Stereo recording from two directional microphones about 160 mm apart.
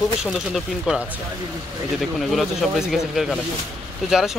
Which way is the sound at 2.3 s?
Centre (ahead or behind).